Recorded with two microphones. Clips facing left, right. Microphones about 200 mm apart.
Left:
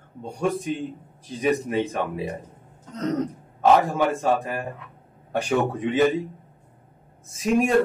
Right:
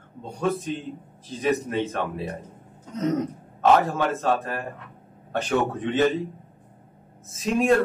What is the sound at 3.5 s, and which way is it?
Speech, 10° left (ahead or behind).